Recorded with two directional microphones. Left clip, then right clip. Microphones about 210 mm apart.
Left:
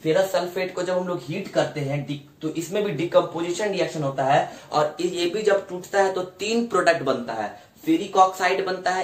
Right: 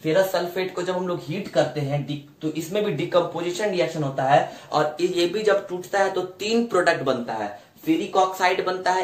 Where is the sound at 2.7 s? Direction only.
15° right (ahead or behind).